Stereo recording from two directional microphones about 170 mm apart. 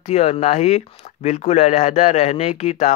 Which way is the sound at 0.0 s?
40° left (ahead or behind).